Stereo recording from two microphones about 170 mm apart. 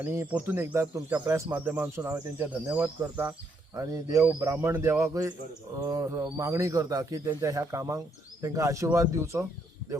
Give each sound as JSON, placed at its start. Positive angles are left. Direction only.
{"t": 0.0, "sound": "speech", "side_deg": -15}
{"t": 5.7, "sound": "bird", "side_deg": -20}
{"t": 6.2, "sound": "speech", "side_deg": -15}